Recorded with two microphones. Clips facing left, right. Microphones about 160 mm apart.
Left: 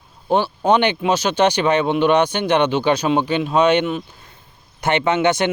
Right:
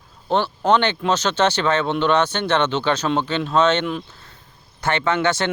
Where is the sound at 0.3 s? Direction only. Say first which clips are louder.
Left 2 dB; 10° left (ahead or behind).